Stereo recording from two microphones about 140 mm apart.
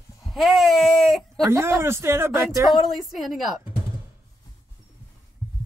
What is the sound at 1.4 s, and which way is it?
Speech, 20° right (ahead or behind).